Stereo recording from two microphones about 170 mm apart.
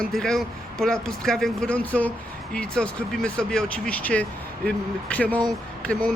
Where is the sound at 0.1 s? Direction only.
Centre (ahead or behind).